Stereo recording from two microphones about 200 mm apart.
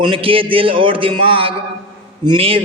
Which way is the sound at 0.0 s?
25° right (ahead or behind).